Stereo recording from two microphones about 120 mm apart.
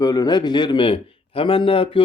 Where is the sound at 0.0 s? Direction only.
30° left (ahead or behind).